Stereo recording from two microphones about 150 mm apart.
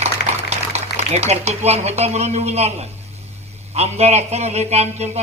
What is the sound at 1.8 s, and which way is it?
A man's voice, 45° right (ahead or behind).